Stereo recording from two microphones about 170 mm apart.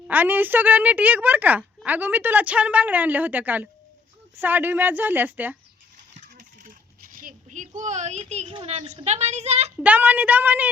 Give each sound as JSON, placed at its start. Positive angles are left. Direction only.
{"t": 0.1, "sound": "a woman's voice", "side_deg": -10}
{"t": 6.1, "sound": "coin", "side_deg": -45}
{"t": 7.8, "sound": "speech", "side_deg": -45}
{"t": 9.8, "sound": "a woman's voice", "side_deg": -10}